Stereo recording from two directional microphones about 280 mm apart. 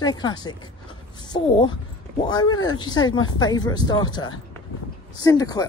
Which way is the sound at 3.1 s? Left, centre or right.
Left.